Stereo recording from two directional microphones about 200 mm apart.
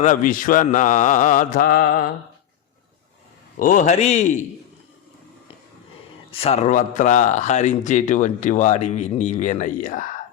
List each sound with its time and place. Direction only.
0.0 s speech: 40° left (ahead or behind)
3.6 s speech: 40° left (ahead or behind)
6.4 s speech: 30° left (ahead or behind)